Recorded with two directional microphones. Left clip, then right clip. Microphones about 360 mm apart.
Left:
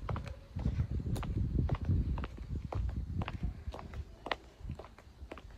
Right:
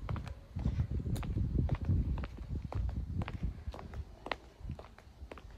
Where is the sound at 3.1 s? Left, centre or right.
Centre.